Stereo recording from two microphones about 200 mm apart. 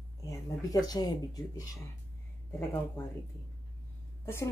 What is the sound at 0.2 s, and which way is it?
Speech, 15° left (ahead or behind).